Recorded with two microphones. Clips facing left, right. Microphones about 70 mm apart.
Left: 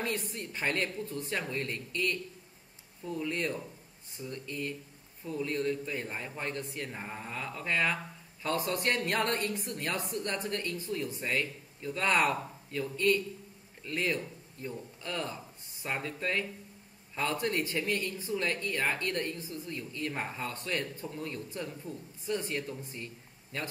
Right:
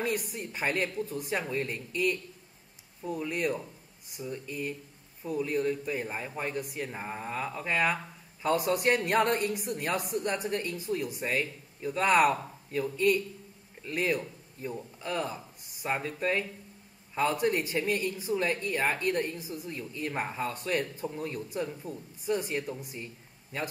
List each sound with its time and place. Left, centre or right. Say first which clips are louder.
0.0 s speech: right 3 dB; centre